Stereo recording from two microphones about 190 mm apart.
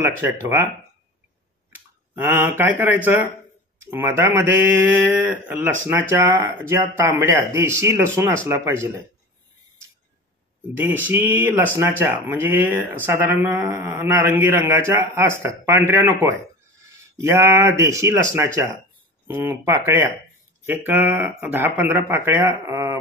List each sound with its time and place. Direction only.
0.0 s speech: 15° right (ahead or behind)
2.1 s speech: 10° right (ahead or behind)
10.8 s speech: 10° right (ahead or behind)